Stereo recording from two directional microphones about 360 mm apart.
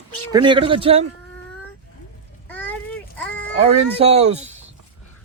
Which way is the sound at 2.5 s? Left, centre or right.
Centre.